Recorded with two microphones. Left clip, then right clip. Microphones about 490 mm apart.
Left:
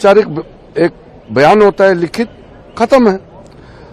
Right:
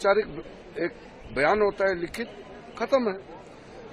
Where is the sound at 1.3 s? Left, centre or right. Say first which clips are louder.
Left 15 dB; left.